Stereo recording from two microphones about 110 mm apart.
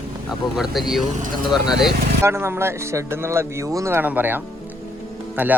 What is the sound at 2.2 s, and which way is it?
Speech, 20° right (ahead or behind).